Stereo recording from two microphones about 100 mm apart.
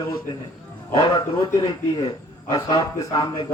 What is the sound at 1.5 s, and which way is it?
A man's voice, 35° left (ahead or behind).